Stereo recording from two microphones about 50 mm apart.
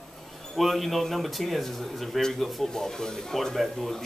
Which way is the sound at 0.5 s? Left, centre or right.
Centre.